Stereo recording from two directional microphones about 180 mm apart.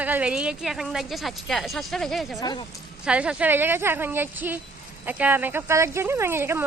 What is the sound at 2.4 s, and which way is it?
Speech, 25° left (ahead or behind).